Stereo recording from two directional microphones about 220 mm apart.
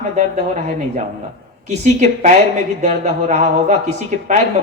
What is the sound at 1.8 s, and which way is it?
A man's voice, 30° right (ahead or behind).